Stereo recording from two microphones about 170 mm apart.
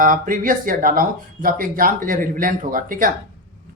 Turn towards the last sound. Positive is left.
turn(degrees=-55)  # may be behind; listen again after turning